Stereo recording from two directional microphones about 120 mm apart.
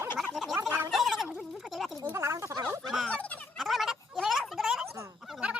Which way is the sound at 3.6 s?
Centre (ahead or behind).